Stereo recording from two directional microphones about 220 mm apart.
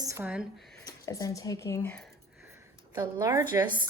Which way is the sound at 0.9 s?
15° left (ahead or behind).